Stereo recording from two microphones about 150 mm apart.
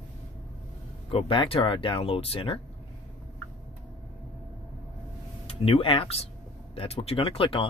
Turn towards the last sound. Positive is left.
turn(degrees=35)  # may be behind; listen again after turning